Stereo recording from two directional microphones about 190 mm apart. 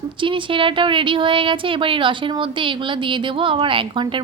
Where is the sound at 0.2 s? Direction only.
25° right (ahead or behind).